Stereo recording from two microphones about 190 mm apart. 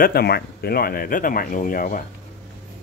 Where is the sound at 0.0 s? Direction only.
55° left (ahead or behind).